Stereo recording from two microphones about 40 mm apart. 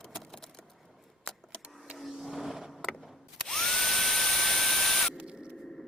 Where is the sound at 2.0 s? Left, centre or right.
Centre.